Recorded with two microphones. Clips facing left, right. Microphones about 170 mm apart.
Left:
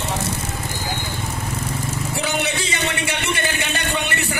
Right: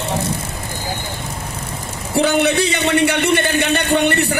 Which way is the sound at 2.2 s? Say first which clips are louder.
Right 11 dB; 60° right (ahead or behind).